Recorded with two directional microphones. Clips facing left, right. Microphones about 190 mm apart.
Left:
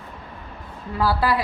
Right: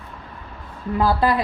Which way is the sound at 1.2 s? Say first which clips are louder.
Right 2 dB; 20° right (ahead or behind).